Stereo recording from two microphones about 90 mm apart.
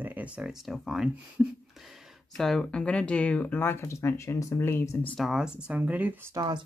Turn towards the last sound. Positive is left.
turn(degrees=-50)  # may be behind; listen again after turning